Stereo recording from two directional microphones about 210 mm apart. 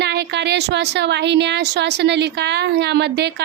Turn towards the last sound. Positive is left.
turn(degrees=-50)  # may be behind; listen again after turning